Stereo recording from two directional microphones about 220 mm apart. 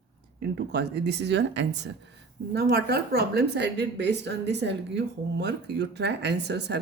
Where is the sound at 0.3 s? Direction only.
50° right (ahead or behind).